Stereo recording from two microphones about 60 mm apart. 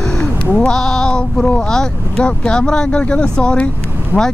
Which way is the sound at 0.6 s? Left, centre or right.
Centre.